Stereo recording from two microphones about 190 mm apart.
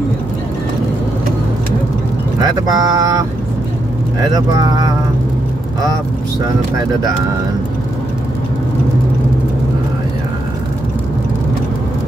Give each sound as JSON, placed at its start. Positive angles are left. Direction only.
{"t": 2.4, "sound": "speech", "side_deg": -20}